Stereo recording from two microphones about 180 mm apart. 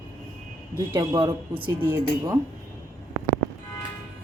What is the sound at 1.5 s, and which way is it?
Speech, 10° right (ahead or behind).